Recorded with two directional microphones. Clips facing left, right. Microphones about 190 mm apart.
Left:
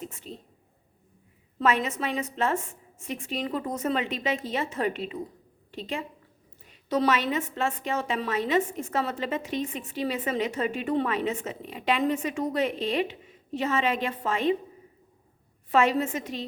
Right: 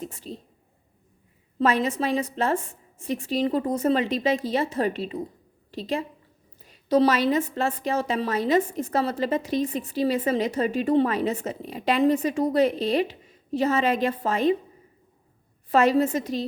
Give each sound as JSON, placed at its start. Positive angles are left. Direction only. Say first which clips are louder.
{"t": 0.0, "sound": "speech", "louder": "right 4 dB", "side_deg": -35}
{"t": 1.5, "sound": "a woman's voice", "louder": "right 3 dB", "side_deg": -35}
{"t": 15.7, "sound": "a woman's voice", "louder": "right 4 dB", "side_deg": -40}